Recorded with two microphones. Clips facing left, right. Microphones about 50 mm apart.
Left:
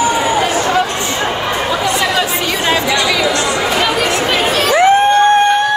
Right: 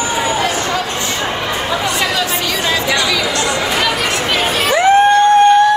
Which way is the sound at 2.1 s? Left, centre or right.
Left.